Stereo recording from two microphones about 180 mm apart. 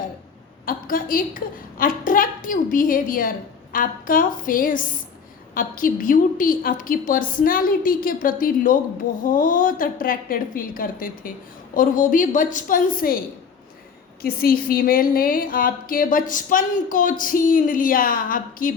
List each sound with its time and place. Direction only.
0.6 s a woman's voice: 50° left (ahead or behind)
14.2 s a woman's voice: 55° left (ahead or behind)